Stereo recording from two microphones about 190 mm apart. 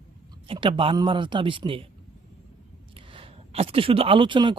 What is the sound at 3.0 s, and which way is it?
Speech, 30° right (ahead or behind).